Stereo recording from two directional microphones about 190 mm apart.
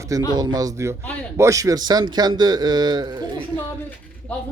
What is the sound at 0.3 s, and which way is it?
A man's voice, 20° right (ahead or behind).